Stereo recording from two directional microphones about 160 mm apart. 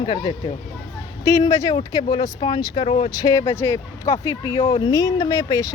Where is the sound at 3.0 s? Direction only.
20° left (ahead or behind).